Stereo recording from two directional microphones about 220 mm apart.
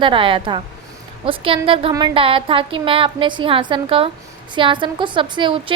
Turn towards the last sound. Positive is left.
turn(degrees=-25)  # may be behind; listen again after turning